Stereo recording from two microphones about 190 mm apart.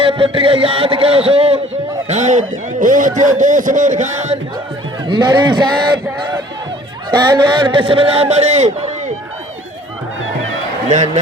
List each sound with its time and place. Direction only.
0.0 s a man's voice: 30° right (ahead or behind)
5.0 s speech: 25° right (ahead or behind)
10.8 s speech: 40° right (ahead or behind)